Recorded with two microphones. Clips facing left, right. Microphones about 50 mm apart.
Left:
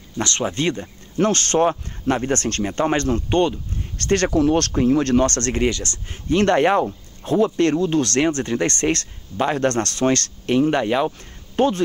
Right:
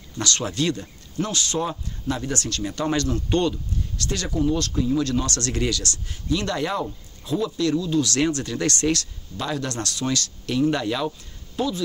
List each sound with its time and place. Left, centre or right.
0.2 s speech: left
1.1 s speech: left
4.0 s speech: left
4.4 s speech: left
10.4 s speech: left
11.5 s speech: left